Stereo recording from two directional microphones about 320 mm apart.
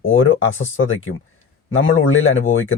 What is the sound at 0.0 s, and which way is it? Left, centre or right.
Speech, left.